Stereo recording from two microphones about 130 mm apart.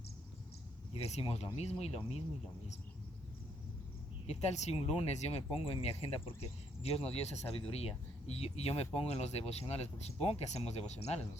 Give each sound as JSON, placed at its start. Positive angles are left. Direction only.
{"t": 0.9, "sound": "speech", "side_deg": 50}
{"t": 4.3, "sound": "speech", "side_deg": 55}